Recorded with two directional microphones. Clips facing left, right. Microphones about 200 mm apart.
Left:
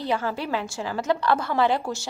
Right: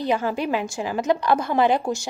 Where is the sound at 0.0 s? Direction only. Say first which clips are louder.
Right 4 dB; 15° right (ahead or behind).